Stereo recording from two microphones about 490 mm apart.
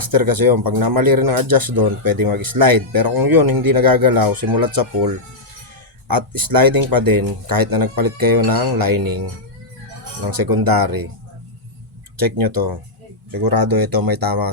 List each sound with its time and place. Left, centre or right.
0.0 s speech: right
6.1 s speech: right
10.2 s speech: right
12.1 s speech: right